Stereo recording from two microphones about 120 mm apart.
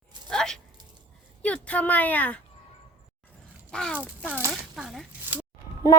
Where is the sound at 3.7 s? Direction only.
5° left (ahead or behind).